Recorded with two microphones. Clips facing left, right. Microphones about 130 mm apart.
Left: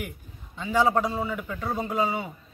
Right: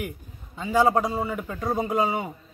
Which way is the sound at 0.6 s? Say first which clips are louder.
Right 2 dB; 10° right (ahead or behind).